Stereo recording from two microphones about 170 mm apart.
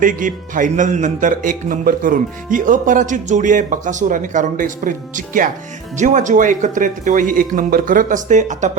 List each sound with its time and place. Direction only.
0.0 s a man's voice: 50° right (ahead or behind)